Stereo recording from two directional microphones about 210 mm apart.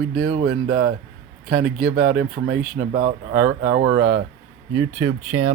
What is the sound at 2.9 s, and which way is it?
Speech, 40° right (ahead or behind).